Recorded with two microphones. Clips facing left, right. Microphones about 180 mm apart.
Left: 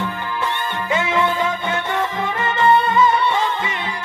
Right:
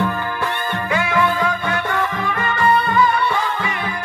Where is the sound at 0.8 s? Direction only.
25° left (ahead or behind).